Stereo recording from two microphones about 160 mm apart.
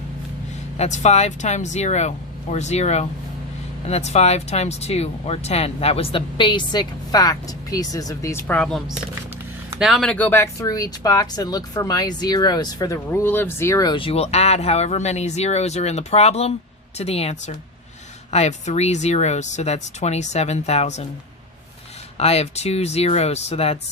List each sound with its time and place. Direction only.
0.8 s speech: 45° left (ahead or behind); by 8.5 s 15° left (ahead or behind)
8.5 s speech: 5° left (ahead or behind); by 21.1 s 45° left (ahead or behind)
22.2 s speech: 40° left (ahead or behind)